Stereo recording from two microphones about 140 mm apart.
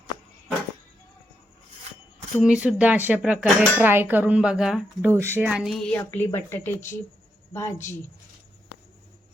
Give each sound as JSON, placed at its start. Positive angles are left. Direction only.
{"t": 2.4, "sound": "speech", "side_deg": -5}
{"t": 5.1, "sound": "speech", "side_deg": -15}
{"t": 6.0, "sound": "speech", "side_deg": 15}